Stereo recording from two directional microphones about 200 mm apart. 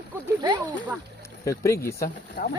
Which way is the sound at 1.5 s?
15° left (ahead or behind).